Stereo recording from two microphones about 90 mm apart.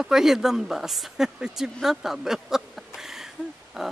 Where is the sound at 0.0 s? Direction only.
5° right (ahead or behind).